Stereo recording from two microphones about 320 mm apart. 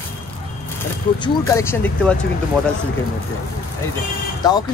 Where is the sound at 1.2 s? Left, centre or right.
Centre.